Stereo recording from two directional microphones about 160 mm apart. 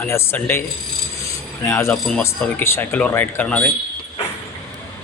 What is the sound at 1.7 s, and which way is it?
Speech, 10° left (ahead or behind).